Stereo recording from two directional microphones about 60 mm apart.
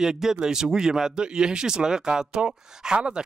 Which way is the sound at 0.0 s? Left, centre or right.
Centre.